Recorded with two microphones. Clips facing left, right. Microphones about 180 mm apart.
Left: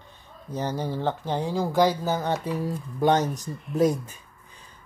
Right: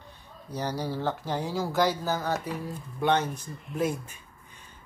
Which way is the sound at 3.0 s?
40° left (ahead or behind).